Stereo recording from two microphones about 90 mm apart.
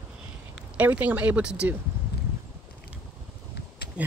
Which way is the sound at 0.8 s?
15° right (ahead or behind).